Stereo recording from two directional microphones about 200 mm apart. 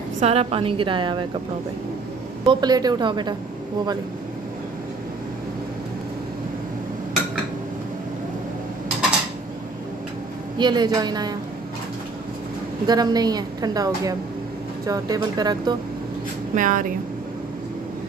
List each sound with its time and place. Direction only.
0.2 s a woman's voice: 30° right (ahead or behind)
2.4 s a woman's voice: 20° right (ahead or behind)
10.6 s a woman's voice: 20° right (ahead or behind)
12.8 s a woman's voice: 20° right (ahead or behind)
16.5 s speech: 40° right (ahead or behind)